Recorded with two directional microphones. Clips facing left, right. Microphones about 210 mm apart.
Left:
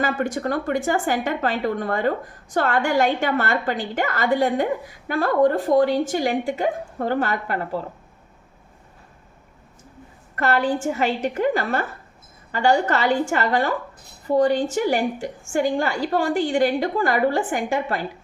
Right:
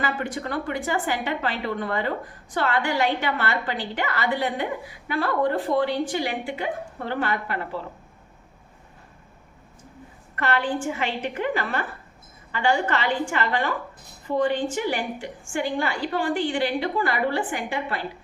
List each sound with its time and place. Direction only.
0.0 s a woman's voice: 45° left (ahead or behind)
10.3 s a woman's voice: 40° left (ahead or behind)